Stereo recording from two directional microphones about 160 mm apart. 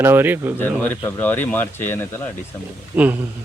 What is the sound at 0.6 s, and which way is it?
Speech, 10° left (ahead or behind).